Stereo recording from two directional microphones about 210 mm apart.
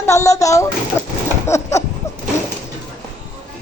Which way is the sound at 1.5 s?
15° left (ahead or behind).